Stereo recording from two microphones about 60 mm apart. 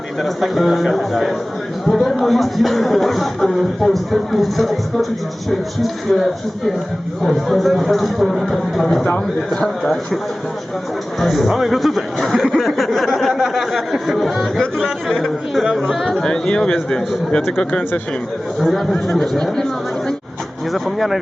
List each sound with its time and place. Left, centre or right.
0.2 s speech: centre
11.2 s speech: centre
16.1 s speech: centre
18.6 s speech: centre
20.7 s speech: centre